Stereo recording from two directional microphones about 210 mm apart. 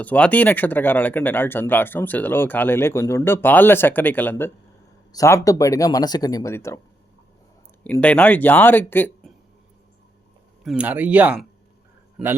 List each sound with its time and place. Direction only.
0.0 s speech: 5° left (ahead or behind)
7.9 s speech: 5° left (ahead or behind)
10.6 s a man's voice: 5° right (ahead or behind)